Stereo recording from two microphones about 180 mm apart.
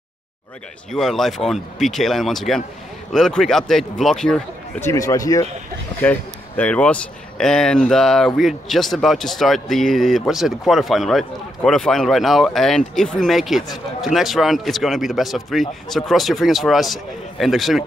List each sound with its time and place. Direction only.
0.9 s speech: centre (ahead or behind)
4.8 s speech: 20° left (ahead or behind)
5.9 s speech: 10° left (ahead or behind)